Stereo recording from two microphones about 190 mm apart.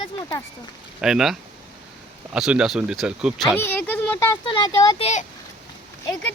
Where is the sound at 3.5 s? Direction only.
10° left (ahead or behind).